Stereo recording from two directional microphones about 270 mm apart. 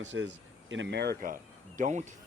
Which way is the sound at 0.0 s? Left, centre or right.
Right.